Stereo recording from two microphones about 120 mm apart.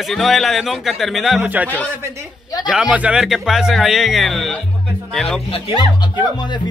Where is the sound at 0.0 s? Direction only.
Centre (ahead or behind).